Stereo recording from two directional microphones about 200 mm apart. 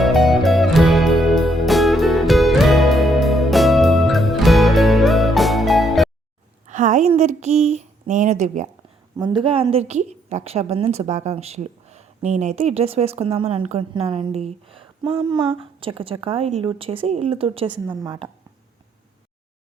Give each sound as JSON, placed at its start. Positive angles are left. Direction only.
{"t": 0.0, "sound": "music", "side_deg": 0}
{"t": 6.7, "sound": "a sound", "side_deg": -40}
{"t": 9.1, "sound": "a woman's voice", "side_deg": -20}